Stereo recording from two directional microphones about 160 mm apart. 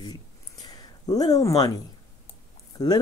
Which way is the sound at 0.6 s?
25° left (ahead or behind).